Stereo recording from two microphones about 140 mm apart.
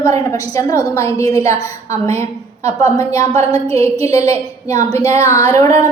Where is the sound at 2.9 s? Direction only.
20° left (ahead or behind).